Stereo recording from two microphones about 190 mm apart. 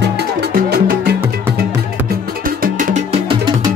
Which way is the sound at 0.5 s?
55° right (ahead or behind).